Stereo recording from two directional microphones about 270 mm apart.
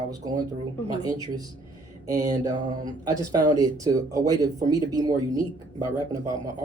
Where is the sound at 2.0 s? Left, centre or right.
Centre.